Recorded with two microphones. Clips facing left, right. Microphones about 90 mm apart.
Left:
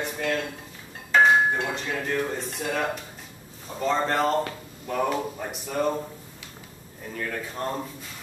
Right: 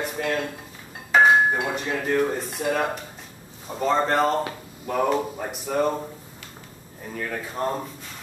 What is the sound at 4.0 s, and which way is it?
Speech, 5° right (ahead or behind).